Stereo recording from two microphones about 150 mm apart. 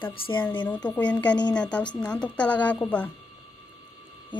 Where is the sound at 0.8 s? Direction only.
10° left (ahead or behind).